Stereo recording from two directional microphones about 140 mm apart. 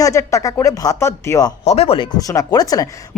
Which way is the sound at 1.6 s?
50° left (ahead or behind).